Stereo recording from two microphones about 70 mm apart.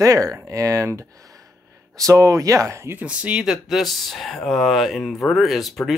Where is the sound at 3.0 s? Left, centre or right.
Centre.